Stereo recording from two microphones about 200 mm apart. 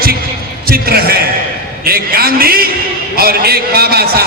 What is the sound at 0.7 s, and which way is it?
A man's voice, 50° right (ahead or behind).